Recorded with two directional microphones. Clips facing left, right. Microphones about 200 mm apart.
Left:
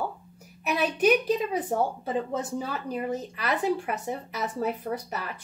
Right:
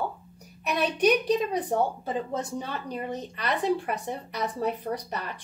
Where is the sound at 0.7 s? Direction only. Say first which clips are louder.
Even; 5° left (ahead or behind).